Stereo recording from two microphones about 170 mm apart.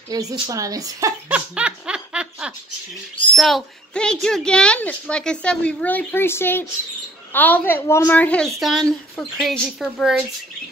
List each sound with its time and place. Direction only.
0.1 s speech: 20° right (ahead or behind)
1.3 s laughter: 5° right (ahead or behind)
3.3 s a woman's voice: centre (ahead or behind)